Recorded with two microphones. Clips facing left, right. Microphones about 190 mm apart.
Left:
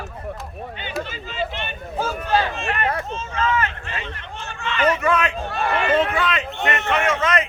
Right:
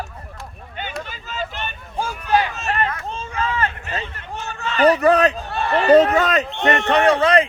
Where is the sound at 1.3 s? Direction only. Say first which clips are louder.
Left 1 dB; 40° right (ahead or behind).